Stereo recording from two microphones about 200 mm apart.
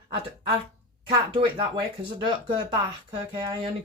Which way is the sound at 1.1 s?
25° right (ahead or behind).